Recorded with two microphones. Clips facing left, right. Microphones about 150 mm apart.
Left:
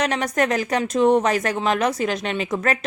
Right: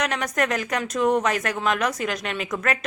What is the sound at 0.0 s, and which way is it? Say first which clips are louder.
Speech: left 3 dB; 35° left (ahead or behind).